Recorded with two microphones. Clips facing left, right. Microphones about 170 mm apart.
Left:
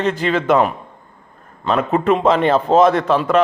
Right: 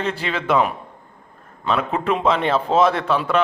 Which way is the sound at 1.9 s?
45° left (ahead or behind).